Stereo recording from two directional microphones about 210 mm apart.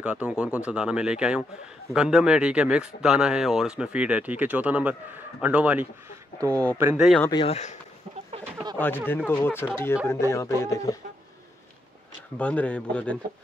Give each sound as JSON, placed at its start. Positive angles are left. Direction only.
{"t": 0.0, "sound": "speech", "side_deg": -5}
{"t": 6.4, "sound": "speech", "side_deg": 10}
{"t": 6.8, "sound": "speech", "side_deg": -5}
{"t": 7.2, "sound": "speech", "side_deg": 25}
{"t": 8.7, "sound": "speech", "side_deg": 10}
{"t": 12.4, "sound": "speech", "side_deg": 5}